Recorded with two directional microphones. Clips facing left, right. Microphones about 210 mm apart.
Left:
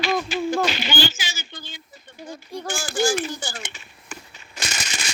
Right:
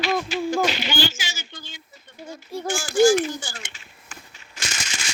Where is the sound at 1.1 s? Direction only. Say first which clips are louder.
Left 1 dB; 35° left (ahead or behind).